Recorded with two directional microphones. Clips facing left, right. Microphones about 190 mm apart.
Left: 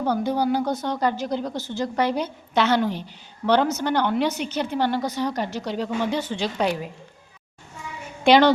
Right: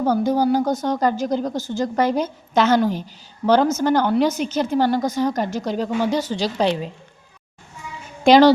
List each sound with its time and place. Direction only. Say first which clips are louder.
0.0 s a woman's voice: right 4 dB; 45° right (ahead or behind); by 6.9 s 25° right (ahead or behind)
8.2 s a woman's voice: right 4 dB; 40° right (ahead or behind)